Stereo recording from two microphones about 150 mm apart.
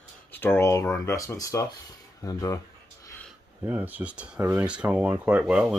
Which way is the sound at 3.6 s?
10° right (ahead or behind).